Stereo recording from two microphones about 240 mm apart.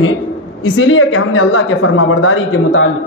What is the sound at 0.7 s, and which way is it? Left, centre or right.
A woman's voice, left.